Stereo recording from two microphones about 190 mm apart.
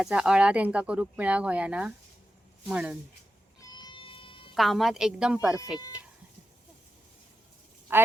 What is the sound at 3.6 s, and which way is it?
Cat, 20° left (ahead or behind).